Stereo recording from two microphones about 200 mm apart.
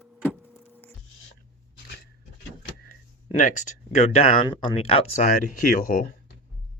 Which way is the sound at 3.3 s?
40° left (ahead or behind).